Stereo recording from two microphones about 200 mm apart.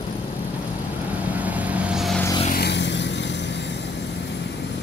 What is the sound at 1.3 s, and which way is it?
Vehicle, 5° right (ahead or behind).